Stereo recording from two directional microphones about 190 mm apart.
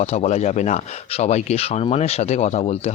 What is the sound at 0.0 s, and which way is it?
Speech, 35° left (ahead or behind).